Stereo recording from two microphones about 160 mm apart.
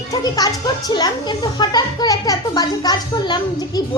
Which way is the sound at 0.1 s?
25° left (ahead or behind).